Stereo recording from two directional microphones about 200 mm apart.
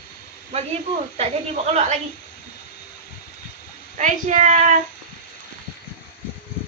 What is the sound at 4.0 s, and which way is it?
Speech, 40° right (ahead or behind).